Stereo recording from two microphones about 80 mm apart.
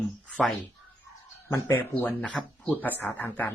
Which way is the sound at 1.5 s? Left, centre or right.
Left.